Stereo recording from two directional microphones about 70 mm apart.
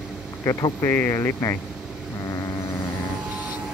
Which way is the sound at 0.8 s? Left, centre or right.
Left.